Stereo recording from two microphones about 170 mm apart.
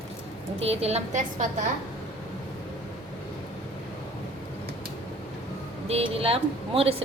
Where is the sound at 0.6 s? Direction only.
35° right (ahead or behind).